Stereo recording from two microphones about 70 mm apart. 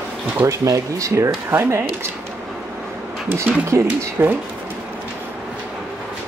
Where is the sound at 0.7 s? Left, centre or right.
Right.